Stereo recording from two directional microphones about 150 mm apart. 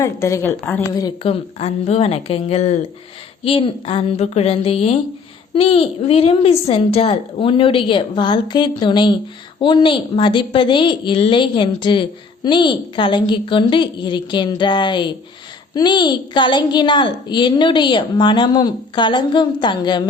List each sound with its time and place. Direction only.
0.0 s a woman's voice: 20° left (ahead or behind)
1.2 s a woman's voice: 40° left (ahead or behind)